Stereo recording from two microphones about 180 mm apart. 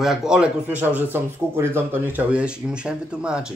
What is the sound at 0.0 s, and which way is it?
Speech, 5° right (ahead or behind).